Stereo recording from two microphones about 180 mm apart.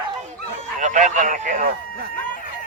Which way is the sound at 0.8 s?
45° right (ahead or behind).